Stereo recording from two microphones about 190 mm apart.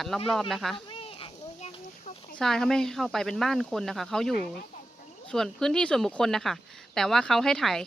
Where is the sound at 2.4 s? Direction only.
5° left (ahead or behind).